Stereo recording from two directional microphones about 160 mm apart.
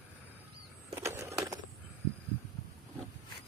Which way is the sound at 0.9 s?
15° right (ahead or behind).